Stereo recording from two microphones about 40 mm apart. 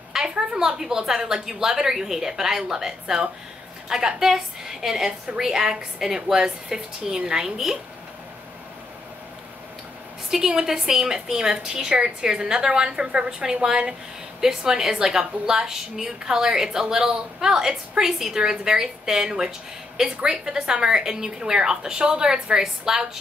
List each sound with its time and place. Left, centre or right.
0.1 s a woman's voice: centre
10.3 s a woman's voice: centre